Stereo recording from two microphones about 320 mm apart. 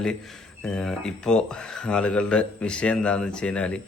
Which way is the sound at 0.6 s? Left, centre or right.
Centre.